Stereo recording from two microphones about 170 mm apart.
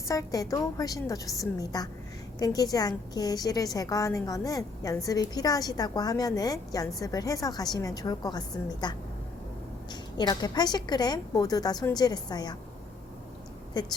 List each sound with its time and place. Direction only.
0.1 s a woman's voice: 20° left (ahead or behind)
13.7 s a woman's voice: 25° left (ahead or behind)